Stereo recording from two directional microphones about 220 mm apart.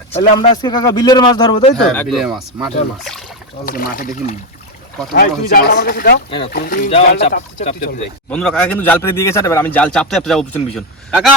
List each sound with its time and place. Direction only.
0.2 s speech: 20° left (ahead or behind)
2.0 s speech: centre (ahead or behind)
3.7 s speech: 40° left (ahead or behind)
6.9 s speech: 30° left (ahead or behind)
8.3 s a man's voice: 5° left (ahead or behind)